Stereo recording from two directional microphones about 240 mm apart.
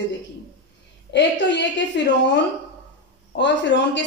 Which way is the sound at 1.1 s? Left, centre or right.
Left.